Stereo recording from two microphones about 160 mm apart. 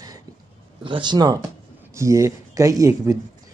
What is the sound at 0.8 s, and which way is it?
Speech, 30° right (ahead or behind).